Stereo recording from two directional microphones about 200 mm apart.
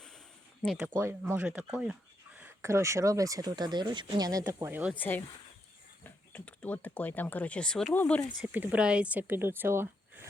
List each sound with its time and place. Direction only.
0.6 s speech: centre (ahead or behind)
0.9 s speech: 15° right (ahead or behind)
4.9 s speech: 10° left (ahead or behind)
8.4 s speech: 10° right (ahead or behind)